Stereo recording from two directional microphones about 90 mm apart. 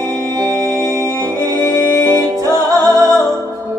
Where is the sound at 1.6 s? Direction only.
25° left (ahead or behind).